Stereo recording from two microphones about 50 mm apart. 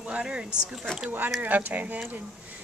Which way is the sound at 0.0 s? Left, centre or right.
Right.